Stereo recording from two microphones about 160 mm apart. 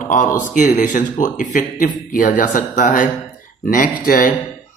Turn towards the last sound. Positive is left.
turn(degrees=60)  # may be behind; listen again after turning